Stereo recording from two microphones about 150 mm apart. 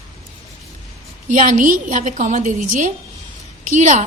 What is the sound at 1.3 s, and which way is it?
A woman's voice, 60° right (ahead or behind).